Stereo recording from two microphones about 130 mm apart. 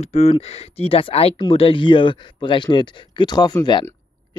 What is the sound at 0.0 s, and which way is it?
Speech, 55° left (ahead or behind).